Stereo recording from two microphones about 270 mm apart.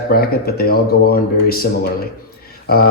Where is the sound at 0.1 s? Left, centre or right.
Left.